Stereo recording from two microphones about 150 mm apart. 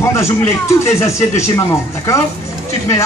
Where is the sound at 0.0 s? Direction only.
20° left (ahead or behind).